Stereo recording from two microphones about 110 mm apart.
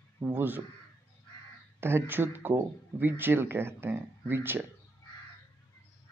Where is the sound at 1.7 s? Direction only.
20° right (ahead or behind).